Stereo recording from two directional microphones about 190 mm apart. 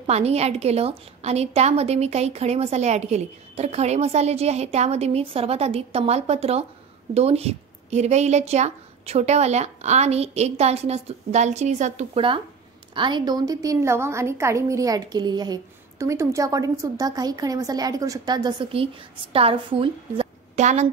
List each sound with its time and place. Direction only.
0.0 s a woman's voice: 35° right (ahead or behind)